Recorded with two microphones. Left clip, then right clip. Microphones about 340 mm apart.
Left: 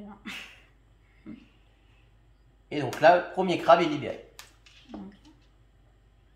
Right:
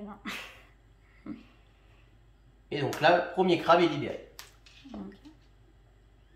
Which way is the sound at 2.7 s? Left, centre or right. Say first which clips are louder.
Left 4 dB; centre.